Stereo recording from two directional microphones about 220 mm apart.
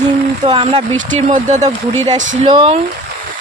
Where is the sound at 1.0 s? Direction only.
35° right (ahead or behind).